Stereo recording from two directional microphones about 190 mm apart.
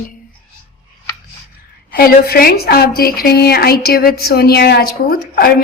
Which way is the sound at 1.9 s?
50° left (ahead or behind).